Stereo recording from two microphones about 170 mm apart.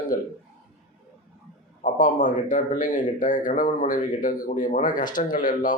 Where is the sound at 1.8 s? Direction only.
50° left (ahead or behind).